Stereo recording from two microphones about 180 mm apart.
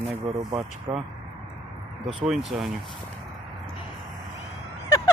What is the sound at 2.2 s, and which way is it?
Speech, centre (ahead or behind).